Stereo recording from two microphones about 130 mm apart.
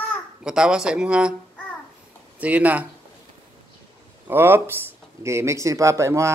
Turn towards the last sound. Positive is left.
turn(degrees=-25)  # may be behind; listen again after turning